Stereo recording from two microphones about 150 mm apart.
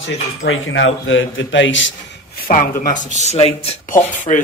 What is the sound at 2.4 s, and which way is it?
Speech, 65° left (ahead or behind).